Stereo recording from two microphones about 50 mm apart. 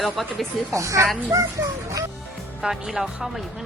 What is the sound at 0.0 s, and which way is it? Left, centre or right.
Speech, centre.